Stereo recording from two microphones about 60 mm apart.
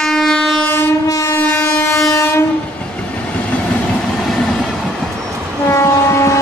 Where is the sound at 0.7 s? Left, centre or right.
Left.